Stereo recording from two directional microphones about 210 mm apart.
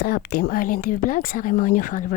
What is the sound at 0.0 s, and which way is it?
Speech, 45° left (ahead or behind).